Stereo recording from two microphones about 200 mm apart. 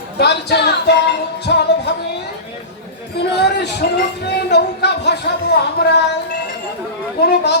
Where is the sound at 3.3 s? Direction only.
55° left (ahead or behind).